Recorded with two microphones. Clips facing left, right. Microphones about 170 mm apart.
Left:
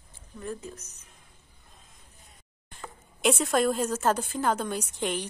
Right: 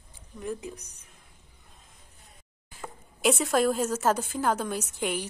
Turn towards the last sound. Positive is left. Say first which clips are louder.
# even
turn(degrees=-10)  # may be behind; listen again after turning